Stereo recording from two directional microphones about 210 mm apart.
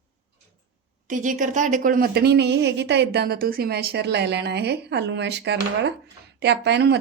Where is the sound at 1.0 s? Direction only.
40° right (ahead or behind).